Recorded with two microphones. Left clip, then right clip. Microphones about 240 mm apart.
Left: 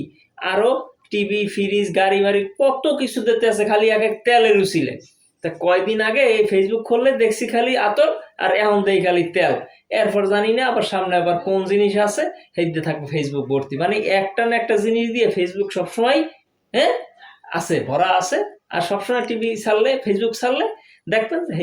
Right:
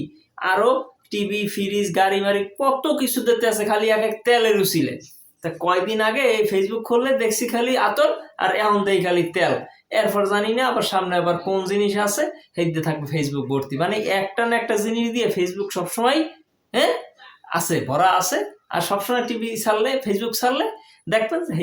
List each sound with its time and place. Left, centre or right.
1.1 s speech: centre
17.5 s speech: centre